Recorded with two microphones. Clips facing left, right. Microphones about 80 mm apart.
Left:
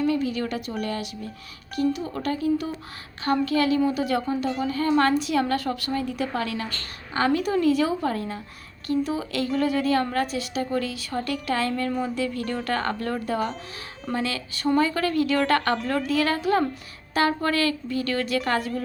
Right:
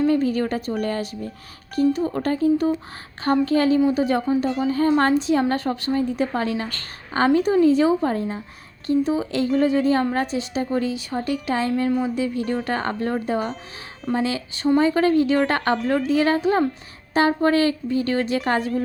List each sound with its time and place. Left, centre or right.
0.0 s a woman's voice: right
11.9 s speech: centre
12.1 s a woman's voice: centre